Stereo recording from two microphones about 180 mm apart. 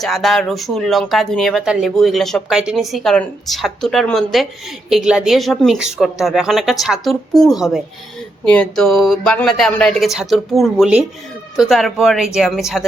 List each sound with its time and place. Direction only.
0.0 s speech: centre (ahead or behind)